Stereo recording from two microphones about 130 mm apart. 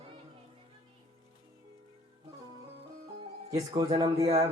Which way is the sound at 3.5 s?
25° right (ahead or behind).